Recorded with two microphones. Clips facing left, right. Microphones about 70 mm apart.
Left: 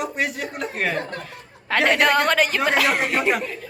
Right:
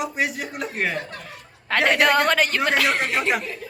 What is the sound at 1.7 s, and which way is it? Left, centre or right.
A woman's voice, centre.